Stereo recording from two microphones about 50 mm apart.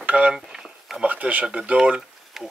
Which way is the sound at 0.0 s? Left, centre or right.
Right.